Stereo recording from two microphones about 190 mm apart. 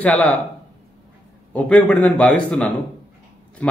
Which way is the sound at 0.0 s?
5° left (ahead or behind).